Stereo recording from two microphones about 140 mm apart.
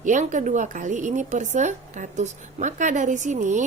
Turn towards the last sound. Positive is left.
turn(degrees=-60)  # may be behind; listen again after turning